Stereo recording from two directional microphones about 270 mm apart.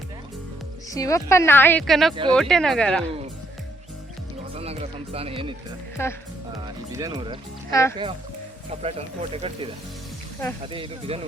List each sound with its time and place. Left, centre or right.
0.9 s a woman's voice: centre
4.5 s speech: right
6.0 s a woman's voice: centre
6.9 s speech: centre
7.7 s a woman's voice: centre
8.7 s speech: right
10.7 s speech: right